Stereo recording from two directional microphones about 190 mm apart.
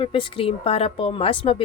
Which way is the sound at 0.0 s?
30° left (ahead or behind).